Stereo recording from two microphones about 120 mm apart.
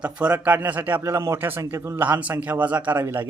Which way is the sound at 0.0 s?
10° right (ahead or behind).